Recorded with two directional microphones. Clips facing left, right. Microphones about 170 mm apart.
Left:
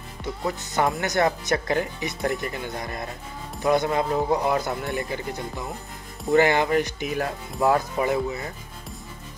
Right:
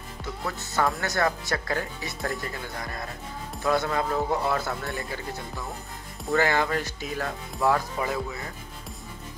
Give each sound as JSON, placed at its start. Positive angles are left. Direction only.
{"t": 0.5, "sound": "speech", "side_deg": 20}